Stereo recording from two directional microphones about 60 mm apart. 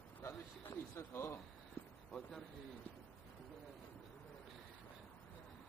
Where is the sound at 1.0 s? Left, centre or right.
Left.